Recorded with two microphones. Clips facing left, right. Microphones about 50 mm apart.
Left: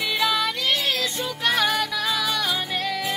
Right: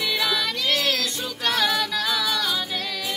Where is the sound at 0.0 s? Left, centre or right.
Centre.